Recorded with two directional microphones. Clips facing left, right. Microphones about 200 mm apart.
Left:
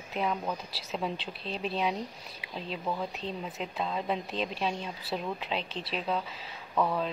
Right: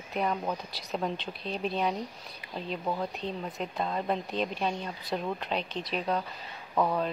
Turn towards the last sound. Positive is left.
turn(degrees=-10)  # may be behind; listen again after turning